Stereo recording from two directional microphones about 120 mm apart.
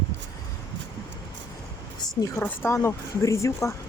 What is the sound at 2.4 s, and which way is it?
Speech, 20° left (ahead or behind).